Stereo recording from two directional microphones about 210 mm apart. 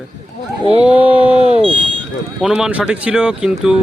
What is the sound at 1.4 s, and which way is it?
Speech, 25° right (ahead or behind).